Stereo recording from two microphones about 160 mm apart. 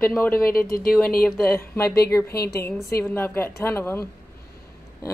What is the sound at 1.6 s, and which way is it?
Speech, 20° left (ahead or behind).